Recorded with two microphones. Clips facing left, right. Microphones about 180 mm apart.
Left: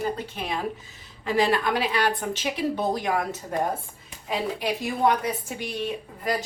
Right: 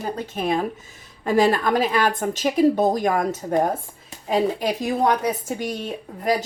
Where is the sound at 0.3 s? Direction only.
45° right (ahead or behind).